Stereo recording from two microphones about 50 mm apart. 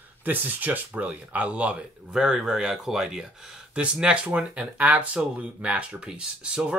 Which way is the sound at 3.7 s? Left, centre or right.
Right.